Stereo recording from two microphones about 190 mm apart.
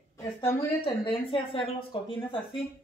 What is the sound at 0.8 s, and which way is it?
A woman's voice, 30° left (ahead or behind).